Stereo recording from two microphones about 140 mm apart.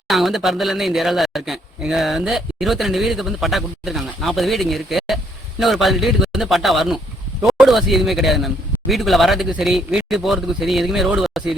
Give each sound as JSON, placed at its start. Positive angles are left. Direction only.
{"t": 0.1, "sound": "speech", "side_deg": 0}